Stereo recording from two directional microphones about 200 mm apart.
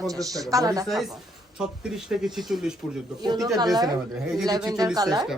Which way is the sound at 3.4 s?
20° right (ahead or behind).